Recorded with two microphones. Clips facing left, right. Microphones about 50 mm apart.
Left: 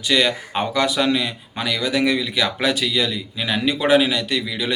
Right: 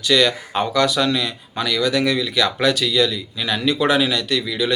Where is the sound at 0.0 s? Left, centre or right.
Centre.